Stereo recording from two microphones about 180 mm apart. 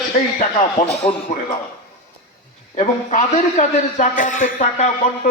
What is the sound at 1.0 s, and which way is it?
Speech, 30° left (ahead or behind).